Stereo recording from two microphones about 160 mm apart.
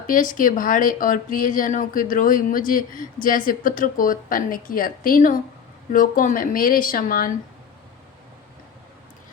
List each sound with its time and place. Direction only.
0.1 s speech: 55° left (ahead or behind)